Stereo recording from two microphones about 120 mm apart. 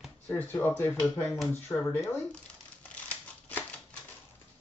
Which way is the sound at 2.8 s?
10° left (ahead or behind).